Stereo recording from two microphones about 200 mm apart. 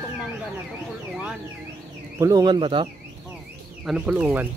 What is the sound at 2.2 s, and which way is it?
Speech, 20° right (ahead or behind).